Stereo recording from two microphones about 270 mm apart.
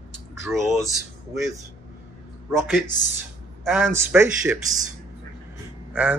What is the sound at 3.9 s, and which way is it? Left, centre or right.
Speech, centre.